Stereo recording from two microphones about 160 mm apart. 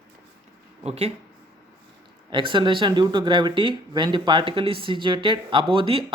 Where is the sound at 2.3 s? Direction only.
30° right (ahead or behind).